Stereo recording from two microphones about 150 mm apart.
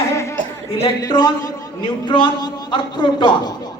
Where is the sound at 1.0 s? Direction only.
25° left (ahead or behind).